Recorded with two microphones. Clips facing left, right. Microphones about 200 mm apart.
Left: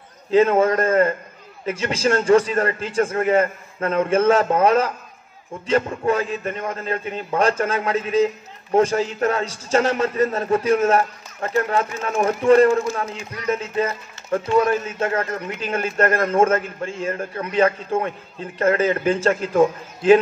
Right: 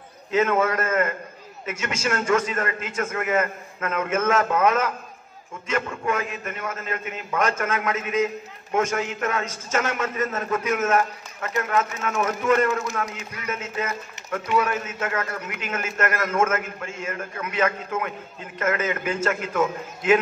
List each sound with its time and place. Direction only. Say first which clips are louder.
0.3 s a man's voice: left 6 dB; 30° left (ahead or behind)